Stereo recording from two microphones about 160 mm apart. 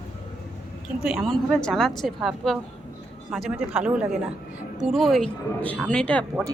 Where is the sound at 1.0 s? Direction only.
Centre (ahead or behind).